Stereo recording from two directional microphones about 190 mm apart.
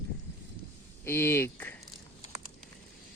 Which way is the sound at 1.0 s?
10° left (ahead or behind).